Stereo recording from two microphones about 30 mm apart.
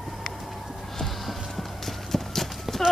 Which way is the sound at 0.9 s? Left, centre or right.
Centre.